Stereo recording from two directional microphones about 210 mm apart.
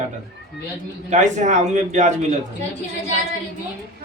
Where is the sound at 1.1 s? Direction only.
35° right (ahead or behind).